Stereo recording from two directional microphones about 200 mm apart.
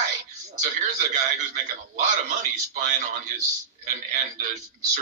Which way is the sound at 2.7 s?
40° right (ahead or behind).